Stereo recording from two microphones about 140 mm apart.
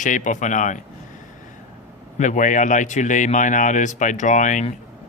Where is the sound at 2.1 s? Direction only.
60° left (ahead or behind).